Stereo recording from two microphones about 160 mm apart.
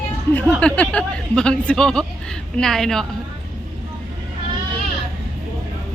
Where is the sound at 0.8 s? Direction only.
5° left (ahead or behind).